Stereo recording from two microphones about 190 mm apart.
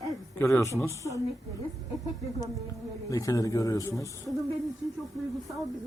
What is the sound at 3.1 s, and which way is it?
Speech, 20° left (ahead or behind).